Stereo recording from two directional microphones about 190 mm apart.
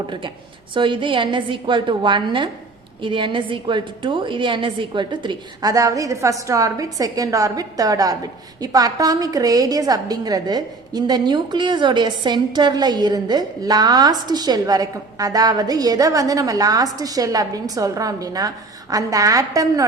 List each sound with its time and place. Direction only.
0.7 s a woman's voice: 25° right (ahead or behind)